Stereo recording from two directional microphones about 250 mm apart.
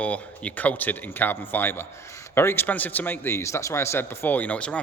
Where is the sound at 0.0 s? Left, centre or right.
Centre.